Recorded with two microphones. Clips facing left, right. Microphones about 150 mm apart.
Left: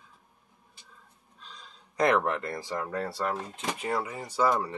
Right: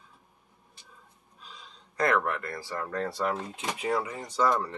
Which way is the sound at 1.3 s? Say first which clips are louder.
Even; 5° right (ahead or behind).